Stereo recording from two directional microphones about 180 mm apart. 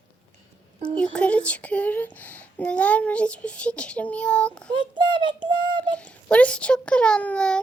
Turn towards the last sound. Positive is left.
turn(degrees=5)  # may be behind; listen again after turning